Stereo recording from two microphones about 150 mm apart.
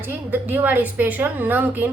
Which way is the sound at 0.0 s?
10° right (ahead or behind).